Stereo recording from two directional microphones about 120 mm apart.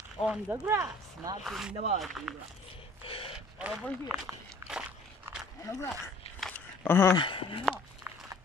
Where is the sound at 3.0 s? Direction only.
50° left (ahead or behind).